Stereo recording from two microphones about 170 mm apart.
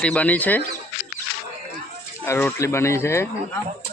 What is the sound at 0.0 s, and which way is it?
Speech, 5° left (ahead or behind).